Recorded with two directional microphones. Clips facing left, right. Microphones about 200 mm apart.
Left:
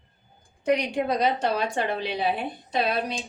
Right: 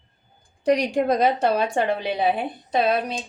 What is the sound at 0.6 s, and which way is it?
A woman's voice, 40° right (ahead or behind).